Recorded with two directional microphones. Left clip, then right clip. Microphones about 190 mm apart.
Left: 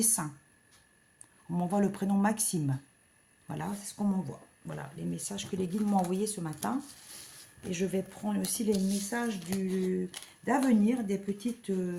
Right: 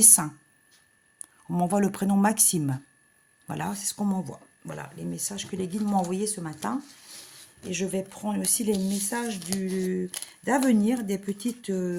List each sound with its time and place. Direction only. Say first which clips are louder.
0.0 s speech: right 9 dB; 50° right (ahead or behind)
1.5 s speech: right 6 dB; 50° right (ahead or behind)
9.0 s speech: right 3 dB; 45° right (ahead or behind)
10.1 s speech: right 4 dB; 55° right (ahead or behind)